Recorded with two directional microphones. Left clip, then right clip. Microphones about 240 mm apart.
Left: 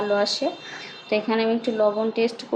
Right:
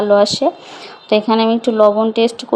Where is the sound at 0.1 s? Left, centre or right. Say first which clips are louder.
Right 12 dB; right.